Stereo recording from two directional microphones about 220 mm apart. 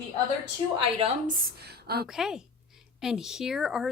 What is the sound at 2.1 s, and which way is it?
Speech, centre (ahead or behind).